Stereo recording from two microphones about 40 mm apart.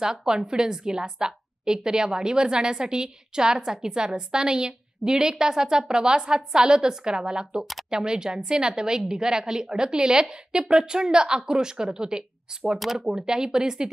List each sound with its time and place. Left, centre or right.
0.0 s a woman's voice: centre
12.7 s speech: centre
13.1 s speech: centre